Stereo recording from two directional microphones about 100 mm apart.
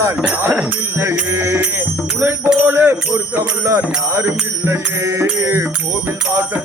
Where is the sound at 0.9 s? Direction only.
25° right (ahead or behind).